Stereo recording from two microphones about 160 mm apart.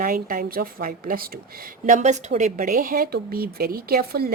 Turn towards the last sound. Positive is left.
turn(degrees=-70)  # may be behind; listen again after turning